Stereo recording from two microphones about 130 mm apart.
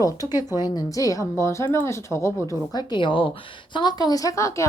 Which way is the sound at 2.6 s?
35° left (ahead or behind).